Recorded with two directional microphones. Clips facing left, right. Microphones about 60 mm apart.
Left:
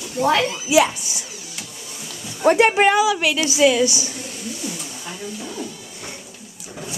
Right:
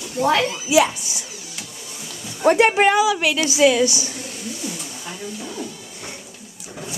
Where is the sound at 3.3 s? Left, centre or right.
Right.